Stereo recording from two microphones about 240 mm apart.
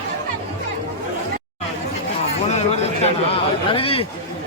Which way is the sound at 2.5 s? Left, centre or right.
Left.